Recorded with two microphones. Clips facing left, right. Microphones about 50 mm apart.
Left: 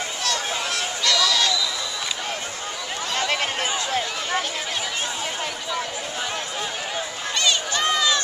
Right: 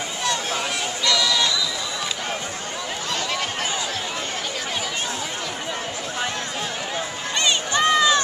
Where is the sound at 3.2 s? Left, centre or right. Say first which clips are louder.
Left 4 dB; left.